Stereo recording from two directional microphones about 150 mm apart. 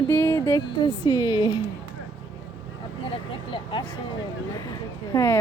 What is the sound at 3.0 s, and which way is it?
Vehicle, 35° left (ahead or behind).